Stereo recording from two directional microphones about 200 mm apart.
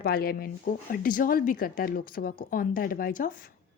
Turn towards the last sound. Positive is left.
turn(degrees=45)  # may be behind; listen again after turning